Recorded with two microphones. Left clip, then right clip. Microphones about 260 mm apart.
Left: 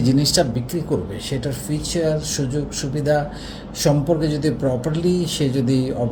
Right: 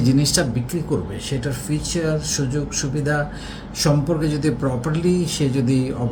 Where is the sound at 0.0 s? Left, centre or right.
Right.